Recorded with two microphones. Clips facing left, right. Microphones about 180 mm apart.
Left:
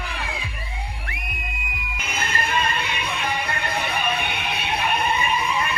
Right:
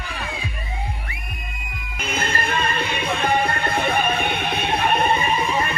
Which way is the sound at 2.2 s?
50° right (ahead or behind).